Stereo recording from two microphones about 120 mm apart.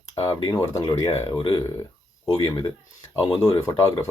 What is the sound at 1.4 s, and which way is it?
Speech, 40° left (ahead or behind).